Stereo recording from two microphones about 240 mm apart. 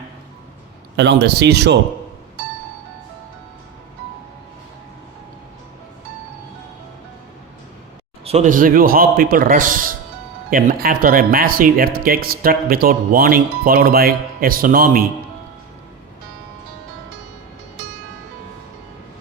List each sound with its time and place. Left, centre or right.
0.9 s speech: right
8.2 s speech: right